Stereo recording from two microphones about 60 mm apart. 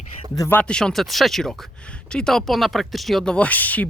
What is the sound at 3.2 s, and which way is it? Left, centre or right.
Speech, left.